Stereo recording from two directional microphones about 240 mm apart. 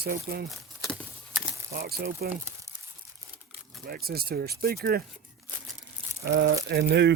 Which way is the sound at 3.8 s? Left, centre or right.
Right.